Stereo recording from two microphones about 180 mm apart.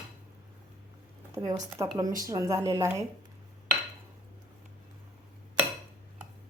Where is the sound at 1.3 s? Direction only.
20° right (ahead or behind).